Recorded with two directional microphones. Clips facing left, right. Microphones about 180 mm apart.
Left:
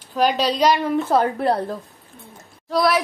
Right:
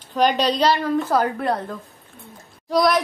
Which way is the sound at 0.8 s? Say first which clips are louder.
Left 1 dB; 20° left (ahead or behind).